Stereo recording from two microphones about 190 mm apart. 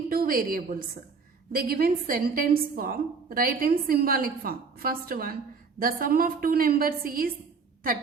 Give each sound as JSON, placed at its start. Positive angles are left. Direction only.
{"t": 0.1, "sound": "a woman's voice", "side_deg": -50}